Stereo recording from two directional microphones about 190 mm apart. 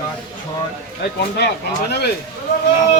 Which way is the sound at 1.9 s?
60° left (ahead or behind).